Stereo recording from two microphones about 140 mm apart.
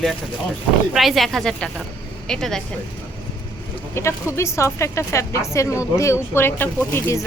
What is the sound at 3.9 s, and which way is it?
A woman's voice, 20° left (ahead or behind).